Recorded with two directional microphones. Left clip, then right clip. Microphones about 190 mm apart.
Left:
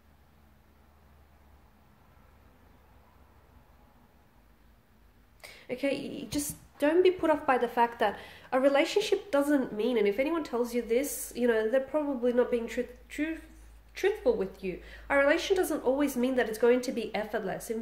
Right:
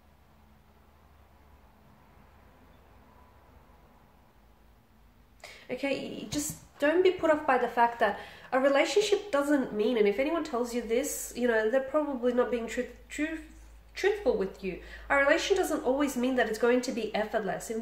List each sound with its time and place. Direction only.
5.4 s a woman's voice: 40° left (ahead or behind)